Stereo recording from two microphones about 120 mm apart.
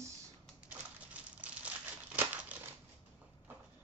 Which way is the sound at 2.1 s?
15° right (ahead or behind).